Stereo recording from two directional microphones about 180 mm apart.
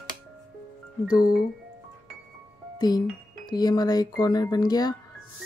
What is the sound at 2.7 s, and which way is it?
Speech, 20° left (ahead or behind).